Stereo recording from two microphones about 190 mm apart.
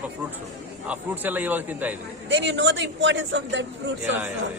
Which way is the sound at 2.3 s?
70° right (ahead or behind).